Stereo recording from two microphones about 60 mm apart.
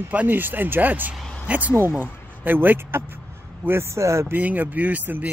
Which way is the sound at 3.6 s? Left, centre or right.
Right.